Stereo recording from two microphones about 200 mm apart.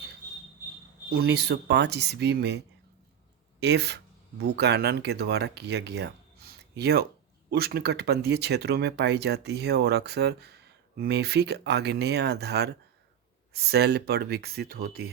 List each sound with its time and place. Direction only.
1.1 s speech: 55° right (ahead or behind)